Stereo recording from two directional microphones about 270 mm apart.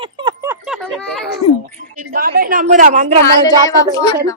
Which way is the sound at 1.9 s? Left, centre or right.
Right.